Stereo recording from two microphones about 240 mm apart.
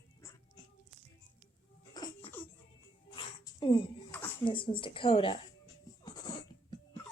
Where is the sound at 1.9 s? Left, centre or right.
Centre.